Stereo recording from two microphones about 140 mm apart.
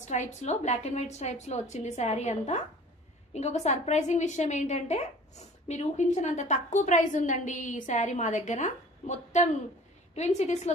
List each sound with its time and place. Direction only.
0.0 s a woman's voice: 55° left (ahead or behind)